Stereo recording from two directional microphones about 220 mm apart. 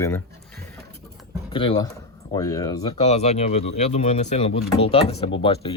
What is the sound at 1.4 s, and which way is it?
Speech, 20° left (ahead or behind).